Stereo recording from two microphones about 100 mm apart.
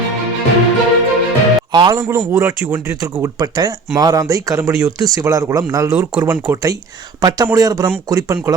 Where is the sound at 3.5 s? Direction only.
40° right (ahead or behind).